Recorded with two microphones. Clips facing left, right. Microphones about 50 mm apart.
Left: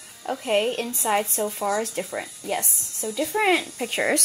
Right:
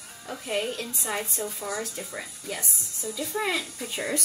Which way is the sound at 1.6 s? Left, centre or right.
Left.